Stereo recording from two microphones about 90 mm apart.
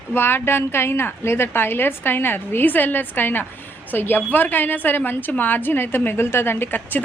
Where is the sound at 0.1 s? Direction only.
25° left (ahead or behind).